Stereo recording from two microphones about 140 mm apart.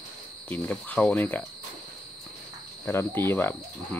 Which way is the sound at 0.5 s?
10° left (ahead or behind).